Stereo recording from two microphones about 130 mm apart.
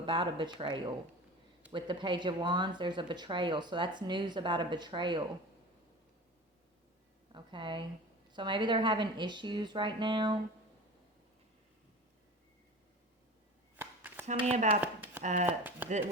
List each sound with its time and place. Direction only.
0.0 s speech: 40° right (ahead or behind)
7.3 s speech: 40° right (ahead or behind)
13.7 s a sound: 15° right (ahead or behind)
14.4 s speech: 60° right (ahead or behind)
14.8 s chopping: 15° right (ahead or behind)
15.2 s speech: 65° right (ahead or behind)
15.4 s speech: 15° right (ahead or behind)